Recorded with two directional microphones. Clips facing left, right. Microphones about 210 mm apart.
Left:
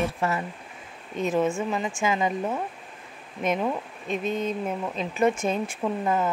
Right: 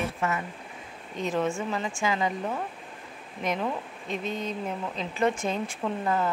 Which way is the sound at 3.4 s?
20° left (ahead or behind).